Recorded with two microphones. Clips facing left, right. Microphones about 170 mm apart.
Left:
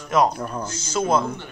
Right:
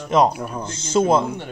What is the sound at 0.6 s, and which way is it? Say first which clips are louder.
Speech: right 7 dB; 25° right (ahead or behind).